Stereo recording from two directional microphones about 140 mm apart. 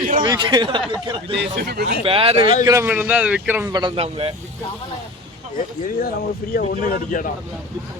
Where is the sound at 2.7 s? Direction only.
20° right (ahead or behind).